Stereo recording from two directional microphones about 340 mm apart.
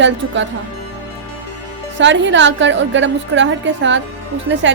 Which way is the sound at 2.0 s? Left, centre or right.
Right.